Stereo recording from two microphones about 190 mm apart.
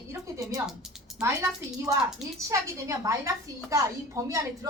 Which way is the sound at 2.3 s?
15° right (ahead or behind).